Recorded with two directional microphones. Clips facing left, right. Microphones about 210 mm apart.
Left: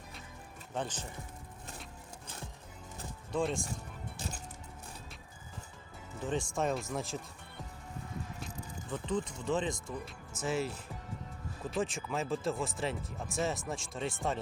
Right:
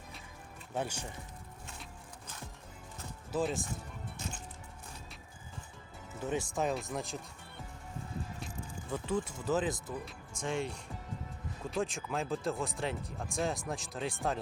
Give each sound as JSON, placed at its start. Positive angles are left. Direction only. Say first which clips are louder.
{"t": 0.7, "sound": "speech", "louder": "right 1 dB", "side_deg": -10}
{"t": 3.3, "sound": "speech", "louder": "even", "side_deg": 0}
{"t": 4.2, "sound": "music", "louder": "left 1 dB", "side_deg": 35}
{"t": 6.2, "sound": "speech", "louder": "even", "side_deg": -5}
{"t": 8.9, "sound": "speech", "louder": "even", "side_deg": -10}